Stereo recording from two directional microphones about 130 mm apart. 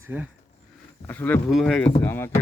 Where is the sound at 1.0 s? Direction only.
15° left (ahead or behind).